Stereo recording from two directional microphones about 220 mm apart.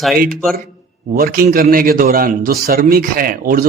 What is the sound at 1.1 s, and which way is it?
A man's voice, 40° right (ahead or behind).